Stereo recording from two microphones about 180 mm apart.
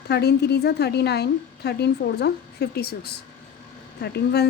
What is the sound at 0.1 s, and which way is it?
Speech, 65° left (ahead or behind).